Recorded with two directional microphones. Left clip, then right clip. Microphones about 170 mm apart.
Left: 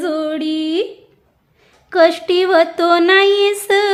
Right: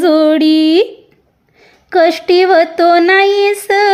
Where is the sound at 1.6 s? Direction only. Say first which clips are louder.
Right 2 dB; 25° right (ahead or behind).